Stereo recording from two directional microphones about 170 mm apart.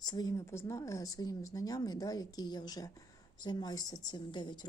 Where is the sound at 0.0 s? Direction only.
25° left (ahead or behind).